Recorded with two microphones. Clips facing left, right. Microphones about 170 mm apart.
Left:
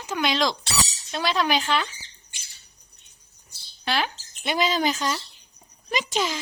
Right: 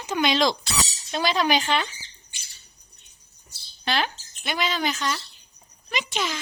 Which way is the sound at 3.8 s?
5° left (ahead or behind).